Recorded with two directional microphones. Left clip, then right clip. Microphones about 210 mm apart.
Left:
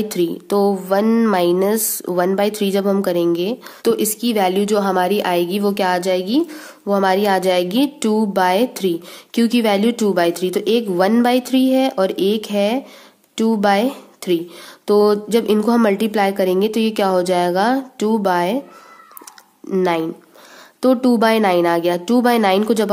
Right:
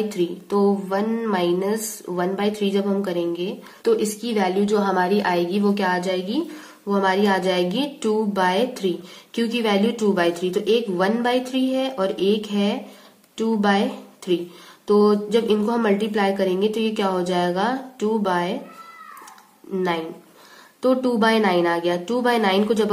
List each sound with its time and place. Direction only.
0.1 s a woman's voice: 50° left (ahead or behind)
19.7 s a woman's voice: 50° left (ahead or behind)